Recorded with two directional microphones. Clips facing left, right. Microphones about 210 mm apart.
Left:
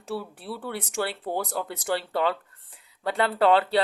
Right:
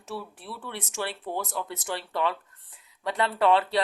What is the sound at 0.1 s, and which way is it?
Speech, 30° left (ahead or behind).